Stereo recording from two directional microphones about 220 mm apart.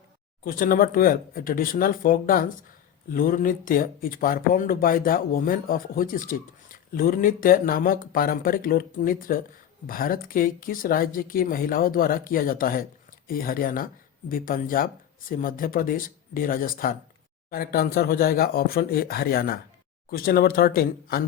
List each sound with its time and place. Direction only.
0.4 s speech: 40° left (ahead or behind)